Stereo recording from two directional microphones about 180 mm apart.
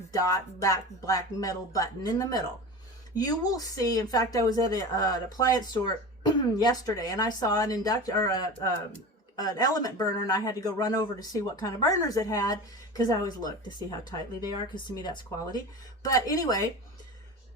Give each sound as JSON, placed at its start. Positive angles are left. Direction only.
{"t": 0.1, "sound": "speech", "side_deg": 20}